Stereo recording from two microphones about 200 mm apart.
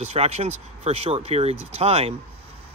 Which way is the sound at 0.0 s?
30° right (ahead or behind).